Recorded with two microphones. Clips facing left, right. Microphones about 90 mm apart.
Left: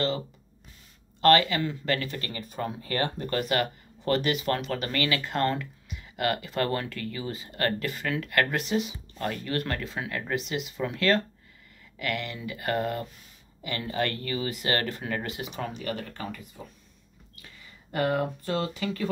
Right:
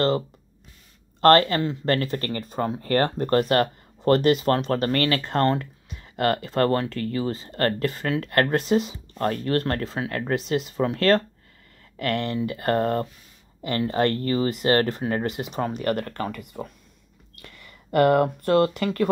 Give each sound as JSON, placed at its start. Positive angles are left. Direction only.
{"t": 1.2, "sound": "speech", "side_deg": -45}
{"t": 15.7, "sound": "speech", "side_deg": -55}